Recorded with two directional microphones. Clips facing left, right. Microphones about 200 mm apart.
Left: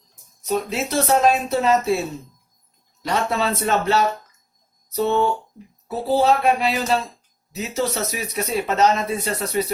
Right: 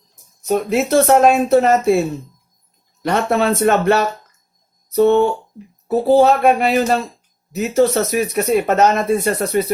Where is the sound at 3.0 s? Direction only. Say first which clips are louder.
Right 6 dB; 55° right (ahead or behind).